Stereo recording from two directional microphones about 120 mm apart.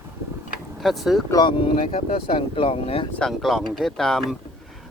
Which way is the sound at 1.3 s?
40° left (ahead or behind).